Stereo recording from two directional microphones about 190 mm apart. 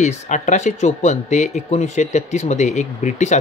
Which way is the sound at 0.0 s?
35° left (ahead or behind).